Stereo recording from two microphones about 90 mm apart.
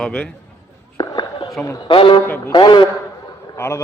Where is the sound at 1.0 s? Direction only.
50° left (ahead or behind).